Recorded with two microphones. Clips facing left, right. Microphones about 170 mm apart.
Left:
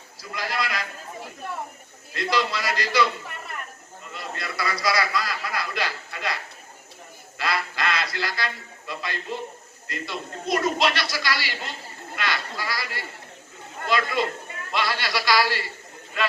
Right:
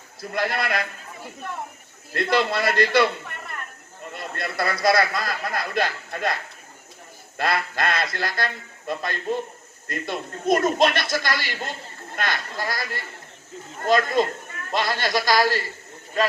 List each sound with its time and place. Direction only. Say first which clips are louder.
0.2 s a man's voice: right 4 dB; 55° right (ahead or behind)
2.1 s a man's voice: right 4 dB; 55° right (ahead or behind)
4.1 s speech: right 3 dB; 55° right (ahead or behind)